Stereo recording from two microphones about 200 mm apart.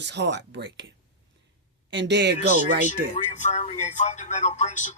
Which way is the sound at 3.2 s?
35° left (ahead or behind).